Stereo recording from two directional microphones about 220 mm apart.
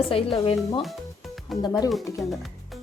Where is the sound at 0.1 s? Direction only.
25° left (ahead or behind).